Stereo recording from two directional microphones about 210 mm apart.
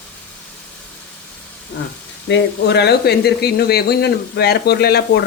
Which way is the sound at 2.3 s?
55° left (ahead or behind).